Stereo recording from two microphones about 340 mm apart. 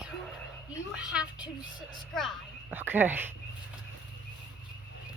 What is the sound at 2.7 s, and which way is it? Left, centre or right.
Whispering, centre.